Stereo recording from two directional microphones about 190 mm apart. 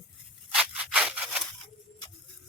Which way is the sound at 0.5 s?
5° right (ahead or behind).